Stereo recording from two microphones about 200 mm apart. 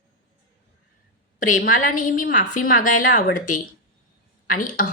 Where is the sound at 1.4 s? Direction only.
40° left (ahead or behind).